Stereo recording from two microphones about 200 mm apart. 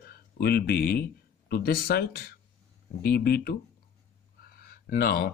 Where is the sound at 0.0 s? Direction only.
50° left (ahead or behind).